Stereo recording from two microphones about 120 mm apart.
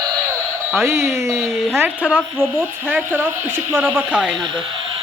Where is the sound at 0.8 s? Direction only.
25° right (ahead or behind).